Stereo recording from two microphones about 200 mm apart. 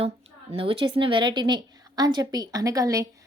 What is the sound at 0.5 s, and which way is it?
A woman's voice, 25° right (ahead or behind).